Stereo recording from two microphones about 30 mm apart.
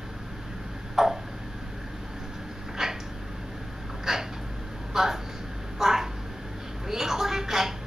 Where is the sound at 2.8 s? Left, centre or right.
Centre.